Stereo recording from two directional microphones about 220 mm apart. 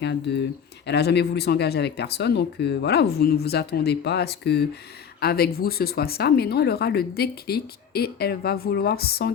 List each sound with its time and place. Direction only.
0.0 s speech: 50° left (ahead or behind)